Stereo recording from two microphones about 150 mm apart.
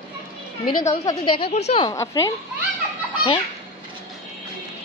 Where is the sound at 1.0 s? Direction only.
30° left (ahead or behind); by 1.8 s 45° left (ahead or behind).